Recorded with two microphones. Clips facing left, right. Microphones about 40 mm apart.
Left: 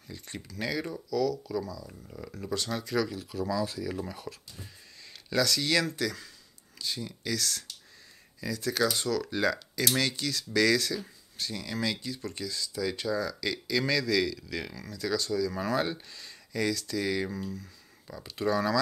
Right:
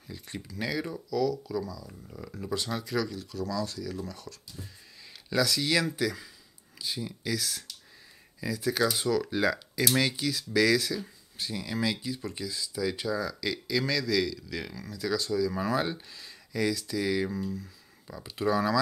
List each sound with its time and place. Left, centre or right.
0.1 s speech: centre
5.3 s speech: centre